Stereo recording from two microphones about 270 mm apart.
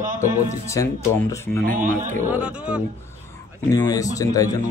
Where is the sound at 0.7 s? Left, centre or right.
Centre.